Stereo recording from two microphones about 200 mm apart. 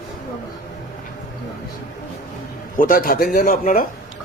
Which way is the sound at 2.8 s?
45° left (ahead or behind).